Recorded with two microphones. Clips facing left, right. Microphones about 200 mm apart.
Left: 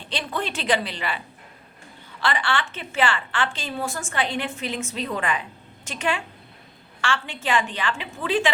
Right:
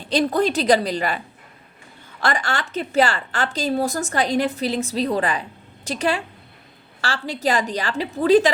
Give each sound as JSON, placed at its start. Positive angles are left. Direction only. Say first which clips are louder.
{"t": 0.1, "sound": "a woman's voice", "louder": "right 10 dB", "side_deg": -40}
{"t": 2.2, "sound": "a woman's voice", "louder": "right 2 dB", "side_deg": -45}